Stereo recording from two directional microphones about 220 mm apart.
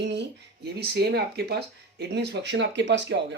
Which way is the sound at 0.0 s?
50° right (ahead or behind).